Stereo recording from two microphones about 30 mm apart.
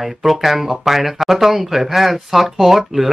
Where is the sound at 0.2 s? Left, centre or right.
Centre.